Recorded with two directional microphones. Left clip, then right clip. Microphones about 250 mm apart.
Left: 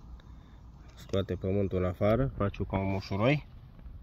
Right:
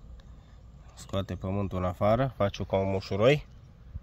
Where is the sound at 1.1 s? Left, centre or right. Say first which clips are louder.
Left 2 dB; centre.